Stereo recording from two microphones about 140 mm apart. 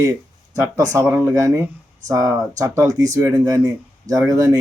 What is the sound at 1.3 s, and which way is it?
A man's voice, 25° right (ahead or behind).